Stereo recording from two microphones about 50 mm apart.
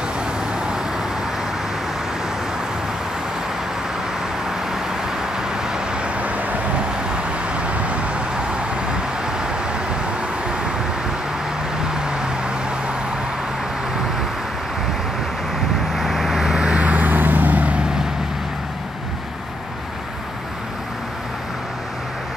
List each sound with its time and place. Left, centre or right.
0.7 s vehicle: centre
5.5 s vehicle: centre
11.9 s vehicle: centre
15.9 s vehicle: centre
16.8 s vehicle: right